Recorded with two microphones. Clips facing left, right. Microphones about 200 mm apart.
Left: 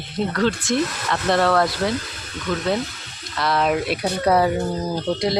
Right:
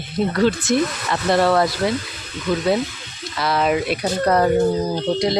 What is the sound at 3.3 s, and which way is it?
Speech, centre (ahead or behind).